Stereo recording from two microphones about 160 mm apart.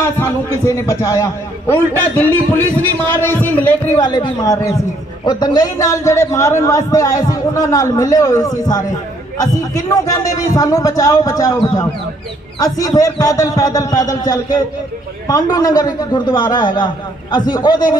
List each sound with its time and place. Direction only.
0.0 s a man's voice: 15° left (ahead or behind)
4.0 s a man's voice: 25° left (ahead or behind)